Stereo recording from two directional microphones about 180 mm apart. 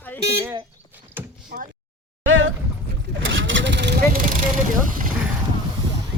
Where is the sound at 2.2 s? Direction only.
90° right.